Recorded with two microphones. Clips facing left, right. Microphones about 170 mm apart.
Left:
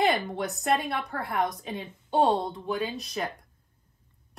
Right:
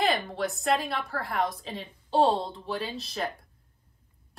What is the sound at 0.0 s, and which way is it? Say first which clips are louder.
A woman's voice: left 1 dB; 20° left (ahead or behind).